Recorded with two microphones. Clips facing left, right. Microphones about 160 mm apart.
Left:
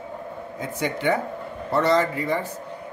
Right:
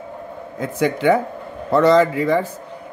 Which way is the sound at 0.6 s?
90° right.